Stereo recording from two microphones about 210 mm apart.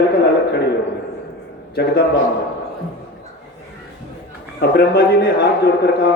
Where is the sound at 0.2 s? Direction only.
55° left (ahead or behind).